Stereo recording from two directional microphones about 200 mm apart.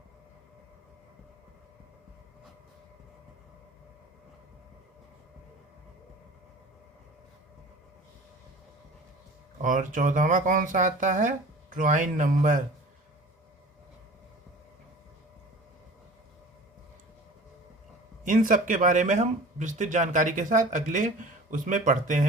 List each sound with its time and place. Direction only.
9.6 s speech: 40° right (ahead or behind)
18.2 s speech: 40° right (ahead or behind)